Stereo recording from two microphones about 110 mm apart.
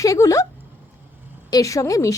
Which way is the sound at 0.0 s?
30° left (ahead or behind).